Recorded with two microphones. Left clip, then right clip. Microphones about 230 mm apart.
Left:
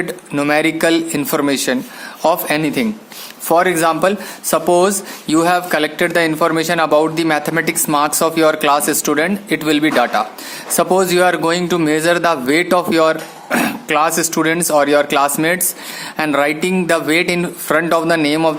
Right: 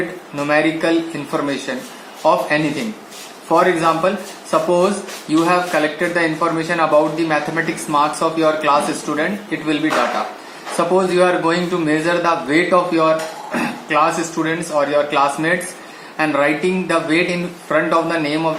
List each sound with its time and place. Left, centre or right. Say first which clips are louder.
0.3 s speech: left 2 dB; left
3.5 s speech: left 1 dB; left
10.9 s speech: left 1 dB; left